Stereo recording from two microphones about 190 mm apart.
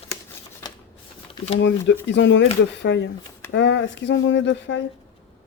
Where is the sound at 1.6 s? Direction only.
70° left (ahead or behind).